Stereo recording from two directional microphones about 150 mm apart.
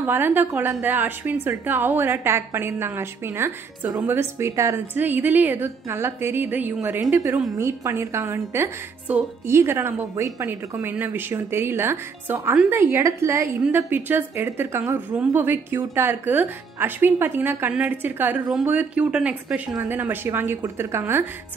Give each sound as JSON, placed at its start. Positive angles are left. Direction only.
{"t": 0.0, "sound": "a woman's voice", "side_deg": -15}